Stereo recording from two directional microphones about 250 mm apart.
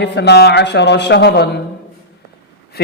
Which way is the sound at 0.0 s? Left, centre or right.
Left.